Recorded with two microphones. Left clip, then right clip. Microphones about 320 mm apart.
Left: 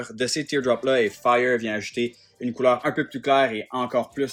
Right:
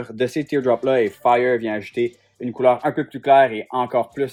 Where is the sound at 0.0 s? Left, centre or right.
Centre.